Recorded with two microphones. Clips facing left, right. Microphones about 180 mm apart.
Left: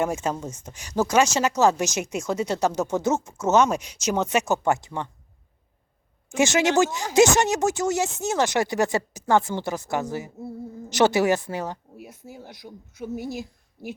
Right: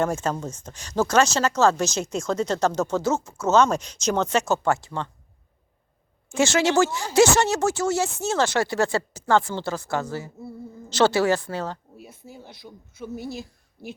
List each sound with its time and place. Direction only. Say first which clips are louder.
0.0 s speech: right 1 dB; 15° left (ahead or behind)
6.3 s a woman's voice: even; 20° left (ahead or behind)